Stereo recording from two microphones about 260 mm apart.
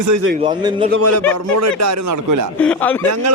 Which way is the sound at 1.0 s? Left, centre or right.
Right.